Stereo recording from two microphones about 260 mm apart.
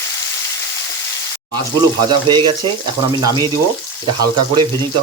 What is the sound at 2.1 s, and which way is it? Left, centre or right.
Speech, centre.